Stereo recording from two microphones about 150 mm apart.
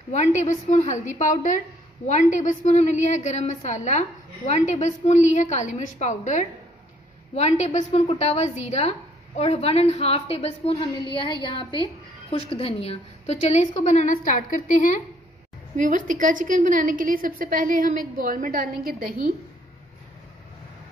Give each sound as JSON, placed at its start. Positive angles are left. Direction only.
{"t": 0.1, "sound": "a woman's voice", "side_deg": 50}
{"t": 15.7, "sound": "a woman's voice", "side_deg": -60}